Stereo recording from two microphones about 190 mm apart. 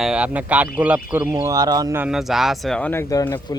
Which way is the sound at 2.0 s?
Centre (ahead or behind).